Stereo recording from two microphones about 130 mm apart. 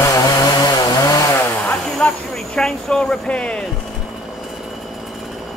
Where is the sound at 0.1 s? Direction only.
30° left (ahead or behind).